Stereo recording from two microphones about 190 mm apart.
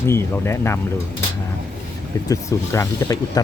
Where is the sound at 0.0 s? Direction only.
15° left (ahead or behind).